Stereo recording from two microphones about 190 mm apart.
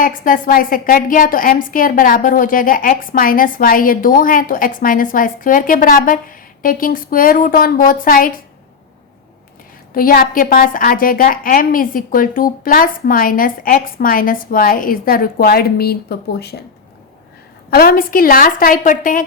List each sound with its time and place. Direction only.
0.0 s a woman's voice: 45° left (ahead or behind)
9.9 s a woman's voice: 50° left (ahead or behind)
17.7 s a woman's voice: 50° left (ahead or behind)